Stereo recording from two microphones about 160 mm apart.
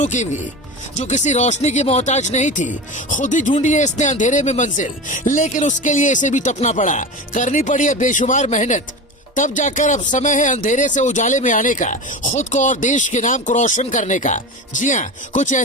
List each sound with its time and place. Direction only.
0.0 s speech: 50° left (ahead or behind)